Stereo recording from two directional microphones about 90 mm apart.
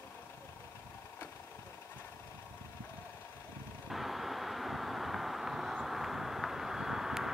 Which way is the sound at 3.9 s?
Centre (ahead or behind).